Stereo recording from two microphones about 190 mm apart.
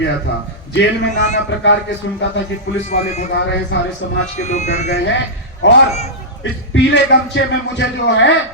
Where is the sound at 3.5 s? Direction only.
65° left (ahead or behind).